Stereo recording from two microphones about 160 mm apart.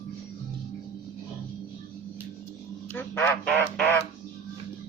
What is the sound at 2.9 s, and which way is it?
Quack, 15° left (ahead or behind).